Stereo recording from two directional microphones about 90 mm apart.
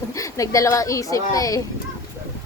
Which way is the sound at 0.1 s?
35° left (ahead or behind).